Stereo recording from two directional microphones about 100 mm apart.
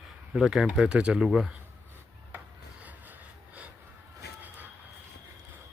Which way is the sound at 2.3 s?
15° right (ahead or behind).